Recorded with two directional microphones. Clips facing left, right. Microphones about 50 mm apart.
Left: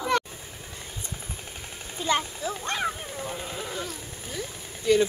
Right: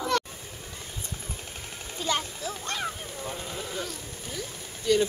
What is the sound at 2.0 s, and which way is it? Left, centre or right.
Speech, centre.